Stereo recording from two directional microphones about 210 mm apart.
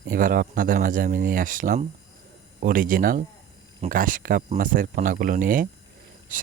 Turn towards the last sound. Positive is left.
turn(degrees=-40)  # may be behind; listen again after turning